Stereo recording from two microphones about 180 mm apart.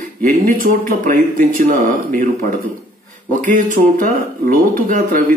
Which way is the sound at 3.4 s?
45° right (ahead or behind).